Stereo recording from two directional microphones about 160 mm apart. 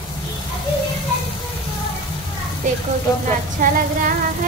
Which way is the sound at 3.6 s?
60° right (ahead or behind).